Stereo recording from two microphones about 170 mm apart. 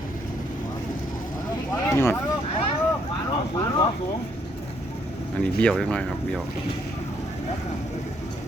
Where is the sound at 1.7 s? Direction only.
15° left (ahead or behind).